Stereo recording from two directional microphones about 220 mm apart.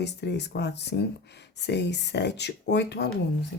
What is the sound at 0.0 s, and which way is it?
Speech, 50° left (ahead or behind).